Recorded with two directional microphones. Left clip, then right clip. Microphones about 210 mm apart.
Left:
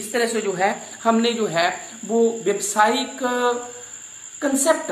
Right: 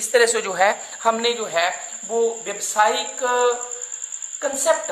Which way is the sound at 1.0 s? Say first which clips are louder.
Left 1 dB; 25° right (ahead or behind).